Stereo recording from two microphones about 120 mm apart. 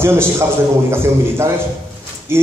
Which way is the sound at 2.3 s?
20° right (ahead or behind).